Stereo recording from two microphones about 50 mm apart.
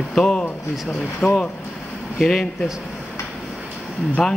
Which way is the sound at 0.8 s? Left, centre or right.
Centre.